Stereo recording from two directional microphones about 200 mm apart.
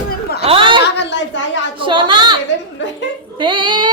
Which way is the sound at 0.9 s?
60° left (ahead or behind).